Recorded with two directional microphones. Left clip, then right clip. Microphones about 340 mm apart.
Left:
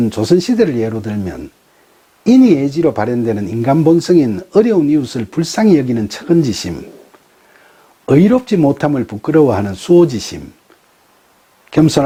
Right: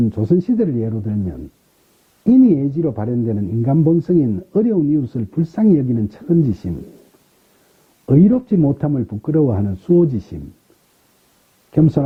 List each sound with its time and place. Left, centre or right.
0.1 s speech: centre
2.6 s speech: centre
8.0 s speech: centre
11.7 s speech: centre